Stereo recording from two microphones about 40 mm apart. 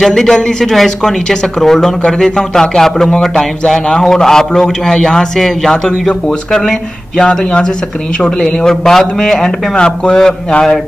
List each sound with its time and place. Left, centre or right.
0.0 s a man's voice: centre
7.2 s a man's voice: left